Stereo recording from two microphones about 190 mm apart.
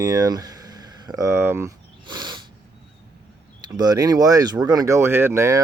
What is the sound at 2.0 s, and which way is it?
Snort, 20° right (ahead or behind).